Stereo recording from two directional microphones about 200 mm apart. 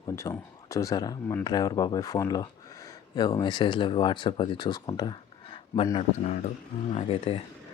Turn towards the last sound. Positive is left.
turn(degrees=30)  # may be behind; listen again after turning